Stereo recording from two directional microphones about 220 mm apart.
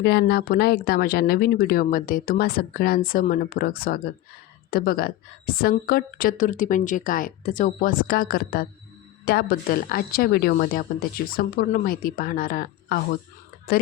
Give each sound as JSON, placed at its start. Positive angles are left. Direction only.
{"t": 0.0, "sound": "a woman's voice", "side_deg": 50}